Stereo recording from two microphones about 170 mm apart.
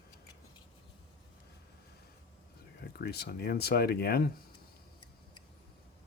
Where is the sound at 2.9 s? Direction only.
70° left (ahead or behind).